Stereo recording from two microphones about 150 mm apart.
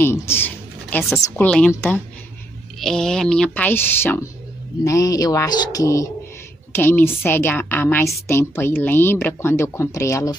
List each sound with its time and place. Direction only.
0.0 s a sound: 15° left (ahead or behind)
1.2 s a woman's voice: 10° left (ahead or behind)
2.8 s a woman's voice: 5° left (ahead or behind); by 10.3 s 20° left (ahead or behind)